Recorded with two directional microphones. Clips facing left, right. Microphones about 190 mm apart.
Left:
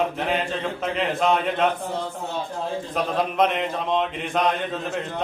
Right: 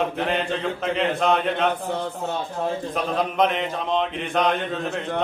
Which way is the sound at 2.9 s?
Centre (ahead or behind).